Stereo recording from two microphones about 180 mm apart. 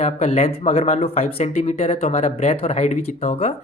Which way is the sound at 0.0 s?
40° left (ahead or behind).